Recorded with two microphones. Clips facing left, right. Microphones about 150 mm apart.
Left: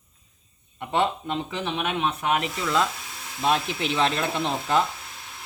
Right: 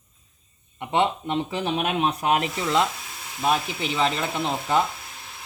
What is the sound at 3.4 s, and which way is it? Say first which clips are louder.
Speech: even; 10° right (ahead or behind).